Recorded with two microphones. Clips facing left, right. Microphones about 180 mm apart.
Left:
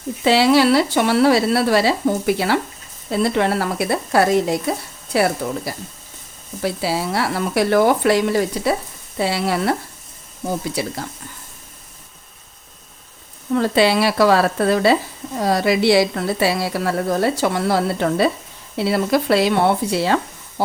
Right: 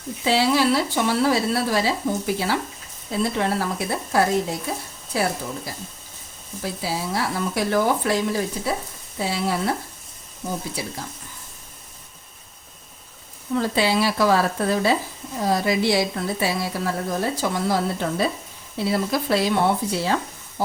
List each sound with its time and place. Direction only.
0.3 s a woman's voice: 75° left (ahead or behind)
6.6 s a woman's voice: 70° left (ahead or behind)
10.8 s a woman's voice: 70° left (ahead or behind)
13.6 s a woman's voice: 70° left (ahead or behind)